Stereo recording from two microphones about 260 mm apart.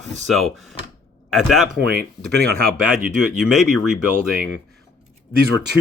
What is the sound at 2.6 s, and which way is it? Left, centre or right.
Speech, right.